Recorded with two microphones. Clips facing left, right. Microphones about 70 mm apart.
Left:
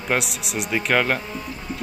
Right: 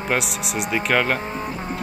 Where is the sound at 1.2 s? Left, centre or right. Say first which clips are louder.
Right 4 dB; right.